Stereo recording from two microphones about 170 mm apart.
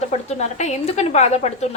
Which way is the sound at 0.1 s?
40° left (ahead or behind).